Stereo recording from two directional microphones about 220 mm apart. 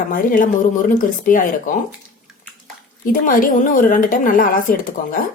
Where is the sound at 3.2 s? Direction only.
40° left (ahead or behind).